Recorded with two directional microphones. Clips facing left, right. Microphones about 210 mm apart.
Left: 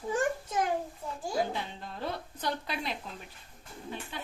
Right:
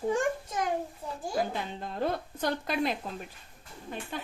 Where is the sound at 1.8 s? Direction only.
50° right (ahead or behind).